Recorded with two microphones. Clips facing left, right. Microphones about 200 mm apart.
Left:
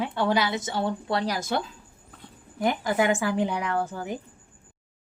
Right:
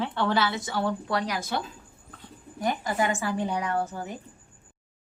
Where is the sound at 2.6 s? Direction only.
75° left (ahead or behind); by 4.1 s 90° left.